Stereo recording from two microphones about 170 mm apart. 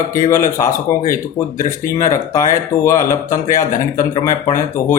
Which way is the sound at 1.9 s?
20° left (ahead or behind).